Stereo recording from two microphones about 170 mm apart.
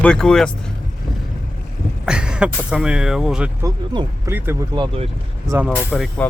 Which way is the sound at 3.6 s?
25° right (ahead or behind).